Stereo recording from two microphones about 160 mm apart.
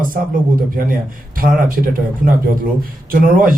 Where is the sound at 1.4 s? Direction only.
60° right (ahead or behind).